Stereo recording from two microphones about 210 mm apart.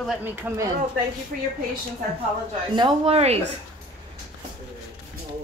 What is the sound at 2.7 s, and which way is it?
Speech, 25° right (ahead or behind).